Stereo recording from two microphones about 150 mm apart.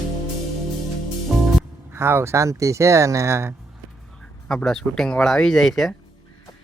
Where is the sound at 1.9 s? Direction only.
15° right (ahead or behind).